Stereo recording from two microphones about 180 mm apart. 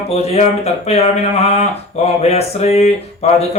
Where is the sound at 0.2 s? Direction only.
35° left (ahead or behind).